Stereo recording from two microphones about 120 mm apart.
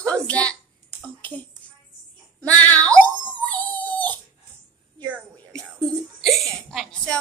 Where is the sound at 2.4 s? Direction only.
15° left (ahead or behind).